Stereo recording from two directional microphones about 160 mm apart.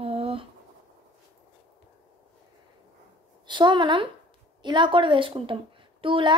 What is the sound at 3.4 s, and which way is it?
A woman's voice, 30° right (ahead or behind).